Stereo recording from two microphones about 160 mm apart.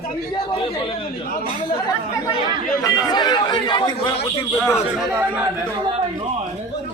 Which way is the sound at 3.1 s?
25° left (ahead or behind).